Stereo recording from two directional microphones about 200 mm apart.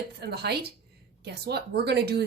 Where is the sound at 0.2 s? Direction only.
55° right (ahead or behind).